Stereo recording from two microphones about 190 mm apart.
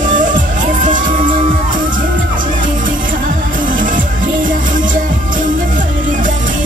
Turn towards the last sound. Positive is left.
turn(degrees=-45)  # may be behind; listen again after turning